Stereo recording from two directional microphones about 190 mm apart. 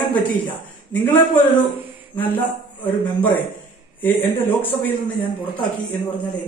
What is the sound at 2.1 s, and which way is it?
Speech, 10° left (ahead or behind).